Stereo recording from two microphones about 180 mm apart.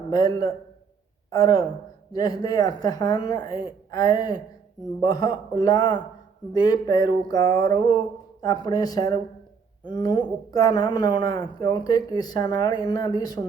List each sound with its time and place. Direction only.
0.1 s a man's voice: 20° left (ahead or behind)